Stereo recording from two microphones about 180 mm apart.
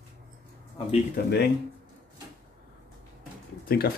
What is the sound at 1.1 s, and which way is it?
Speech, 70° left (ahead or behind).